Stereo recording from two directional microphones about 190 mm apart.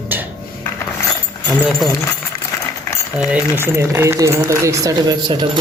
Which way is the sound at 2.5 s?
15° left (ahead or behind).